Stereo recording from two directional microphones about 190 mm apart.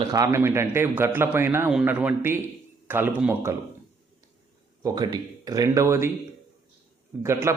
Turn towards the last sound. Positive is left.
turn(degrees=-15)  # may be behind; listen again after turning